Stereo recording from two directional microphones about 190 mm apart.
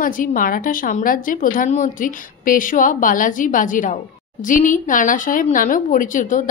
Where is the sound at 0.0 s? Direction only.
45° left (ahead or behind).